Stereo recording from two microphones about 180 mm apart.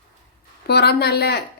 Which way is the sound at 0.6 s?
65° left (ahead or behind).